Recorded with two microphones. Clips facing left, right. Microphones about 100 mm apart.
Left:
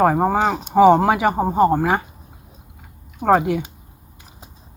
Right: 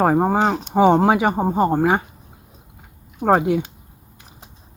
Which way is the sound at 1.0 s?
25° right (ahead or behind).